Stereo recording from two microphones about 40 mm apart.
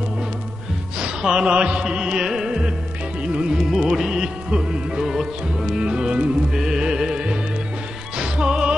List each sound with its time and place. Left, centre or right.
0.9 s music: centre
5.0 s music: centre
5.8 s music: right